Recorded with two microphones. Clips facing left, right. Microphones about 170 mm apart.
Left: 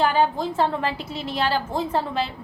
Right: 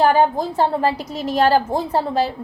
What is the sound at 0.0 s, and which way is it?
A woman's voice, 40° right (ahead or behind).